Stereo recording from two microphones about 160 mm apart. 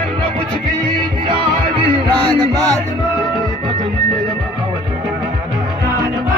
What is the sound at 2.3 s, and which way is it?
Music, 25° right (ahead or behind).